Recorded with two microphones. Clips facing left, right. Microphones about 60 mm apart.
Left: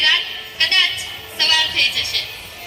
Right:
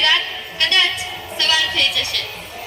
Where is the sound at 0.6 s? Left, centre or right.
Left.